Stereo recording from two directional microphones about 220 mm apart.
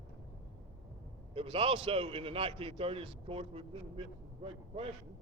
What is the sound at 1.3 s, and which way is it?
A man's voice, 25° right (ahead or behind).